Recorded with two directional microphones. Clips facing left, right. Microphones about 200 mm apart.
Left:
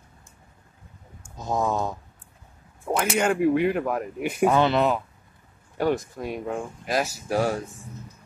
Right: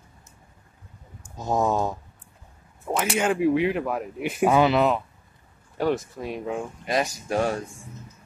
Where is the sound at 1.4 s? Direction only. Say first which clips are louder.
Right 2 dB; 20° right (ahead or behind).